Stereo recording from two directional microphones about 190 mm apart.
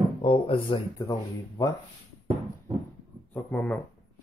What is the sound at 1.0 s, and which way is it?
Speech, 20° left (ahead or behind).